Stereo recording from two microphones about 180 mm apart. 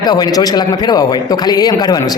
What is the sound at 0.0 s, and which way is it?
A man's voice, 20° left (ahead or behind).